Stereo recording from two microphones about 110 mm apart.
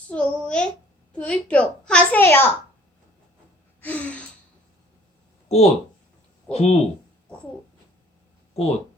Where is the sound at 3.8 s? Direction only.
15° left (ahead or behind).